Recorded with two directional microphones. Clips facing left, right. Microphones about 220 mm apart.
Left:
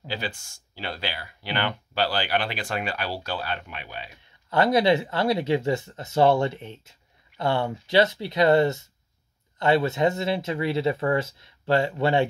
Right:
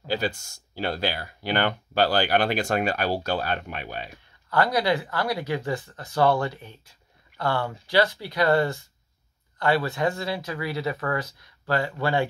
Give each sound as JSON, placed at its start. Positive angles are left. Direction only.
{"t": 0.1, "sound": "speech", "side_deg": -40}
{"t": 4.5, "sound": "speech", "side_deg": 25}